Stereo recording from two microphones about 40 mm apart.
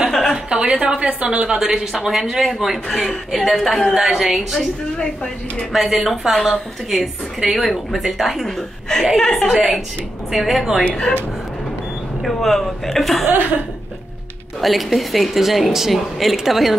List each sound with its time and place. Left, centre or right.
0.1 s a sound: centre
0.5 s a woman's voice: right
1.4 s a woman's voice: centre
3.9 s speech: centre
4.9 s a woman's voice: left
5.7 s a woman's voice: centre
8.5 s a woman's voice: centre
9.5 s a woman's voice: centre
10.9 s a woman's voice: left
12.2 s a woman's voice: centre
14.6 s a woman's voice: centre